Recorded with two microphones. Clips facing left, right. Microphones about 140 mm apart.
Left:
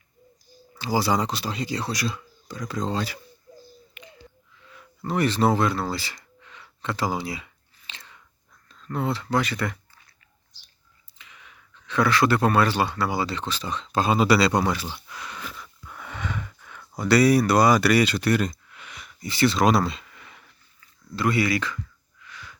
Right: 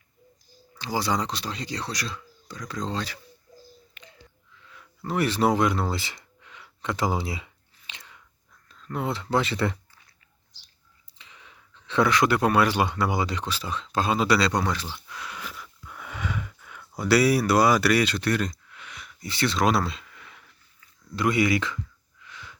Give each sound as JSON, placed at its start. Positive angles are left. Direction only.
{"t": 0.8, "sound": "speech", "side_deg": 5}
{"t": 4.0, "sound": "a sound", "side_deg": 15}
{"t": 5.1, "sound": "speech", "side_deg": -10}
{"t": 6.5, "sound": "a sound", "side_deg": -15}
{"t": 8.7, "sound": "a sound", "side_deg": 0}
{"t": 9.0, "sound": "speech", "side_deg": -20}
{"t": 11.2, "sound": "speech", "side_deg": -30}
{"t": 21.2, "sound": "speech", "side_deg": -20}
{"t": 22.3, "sound": "wheeze", "side_deg": -20}